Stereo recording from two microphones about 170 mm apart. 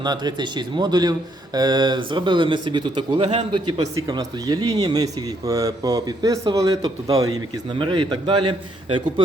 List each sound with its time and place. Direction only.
0.0 s speech: 25° right (ahead or behind)